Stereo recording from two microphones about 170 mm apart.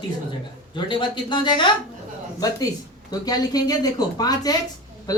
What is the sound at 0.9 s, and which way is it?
Speech, 30° left (ahead or behind).